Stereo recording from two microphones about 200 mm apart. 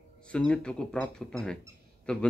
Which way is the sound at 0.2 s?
5° left (ahead or behind).